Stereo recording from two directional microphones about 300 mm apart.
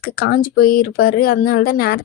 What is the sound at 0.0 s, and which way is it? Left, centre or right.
A woman's voice, left.